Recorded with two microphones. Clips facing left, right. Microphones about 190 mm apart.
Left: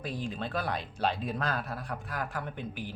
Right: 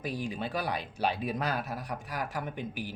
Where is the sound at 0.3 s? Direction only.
5° right (ahead or behind).